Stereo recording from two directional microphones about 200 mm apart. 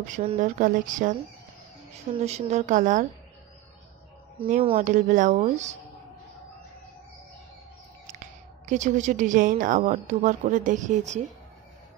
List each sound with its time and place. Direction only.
0.0 s a woman's voice: 35° right (ahead or behind)
2.1 s a woman's voice: 35° right (ahead or behind)
4.7 s a woman's voice: 40° right (ahead or behind)
8.6 s a woman's voice: 40° right (ahead or behind)